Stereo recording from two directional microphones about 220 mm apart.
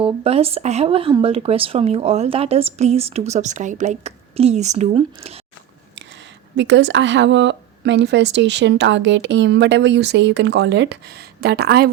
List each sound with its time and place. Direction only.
0.0 s speech: 25° right (ahead or behind)
6.6 s a woman's voice: 55° right (ahead or behind)